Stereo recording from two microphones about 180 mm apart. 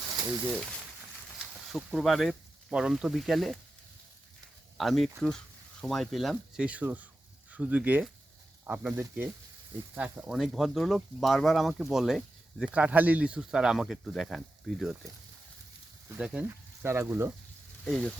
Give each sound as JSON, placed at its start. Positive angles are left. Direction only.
{"t": 1.4, "sound": "speech", "side_deg": 0}
{"t": 4.8, "sound": "speech", "side_deg": 0}
{"t": 16.0, "sound": "speech", "side_deg": -5}
{"t": 17.8, "sound": "speech", "side_deg": 0}